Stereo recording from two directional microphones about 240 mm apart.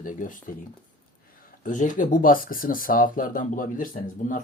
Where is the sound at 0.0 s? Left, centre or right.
Left.